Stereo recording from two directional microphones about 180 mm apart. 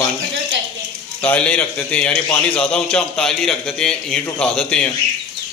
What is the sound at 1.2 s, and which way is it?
A man's voice, 5° left (ahead or behind).